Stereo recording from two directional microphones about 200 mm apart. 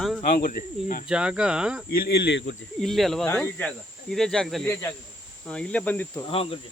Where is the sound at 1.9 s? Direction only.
50° left (ahead or behind).